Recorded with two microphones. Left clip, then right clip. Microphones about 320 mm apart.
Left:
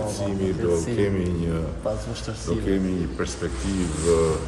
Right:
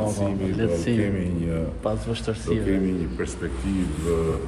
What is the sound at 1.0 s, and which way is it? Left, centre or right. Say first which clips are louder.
Speech: left 2 dB; centre.